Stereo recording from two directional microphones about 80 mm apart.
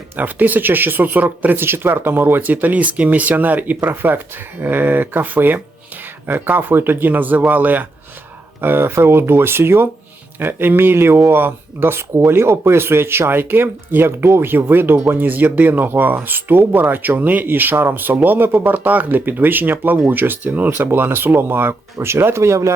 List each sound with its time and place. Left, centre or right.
0.2 s speech: right